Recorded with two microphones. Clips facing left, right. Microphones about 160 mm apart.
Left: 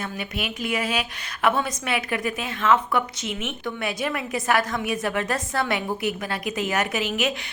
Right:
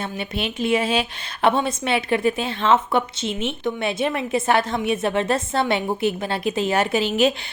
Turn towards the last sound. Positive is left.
turn(degrees=-30)  # may be behind; listen again after turning